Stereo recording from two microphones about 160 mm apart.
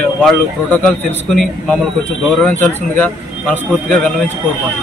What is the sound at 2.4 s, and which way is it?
Speech, 5° left (ahead or behind).